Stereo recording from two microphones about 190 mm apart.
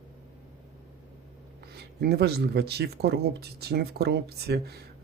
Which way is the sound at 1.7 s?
55° right (ahead or behind).